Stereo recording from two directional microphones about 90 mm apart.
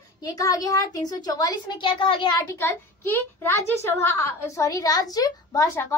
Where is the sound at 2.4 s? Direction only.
25° left (ahead or behind).